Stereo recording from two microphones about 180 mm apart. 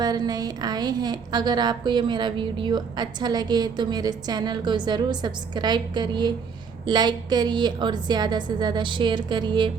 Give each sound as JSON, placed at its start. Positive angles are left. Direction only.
{"t": 0.0, "sound": "a woman's voice", "side_deg": -20}